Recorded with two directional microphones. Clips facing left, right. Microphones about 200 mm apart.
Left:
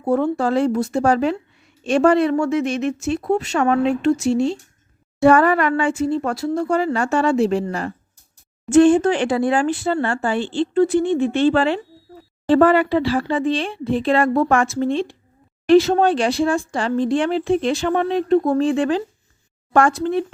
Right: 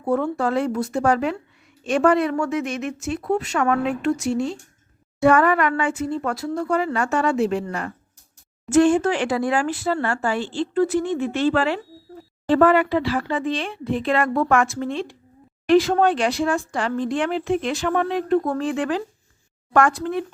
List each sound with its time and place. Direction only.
0.0 s speech: 30° left (ahead or behind)